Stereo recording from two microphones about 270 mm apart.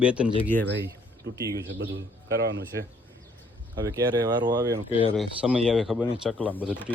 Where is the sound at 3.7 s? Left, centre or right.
Centre.